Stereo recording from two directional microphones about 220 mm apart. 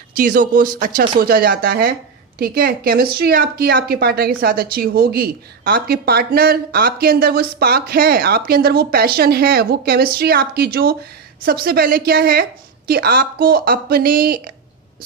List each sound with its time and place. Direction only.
0.1 s speech: 40° right (ahead or behind)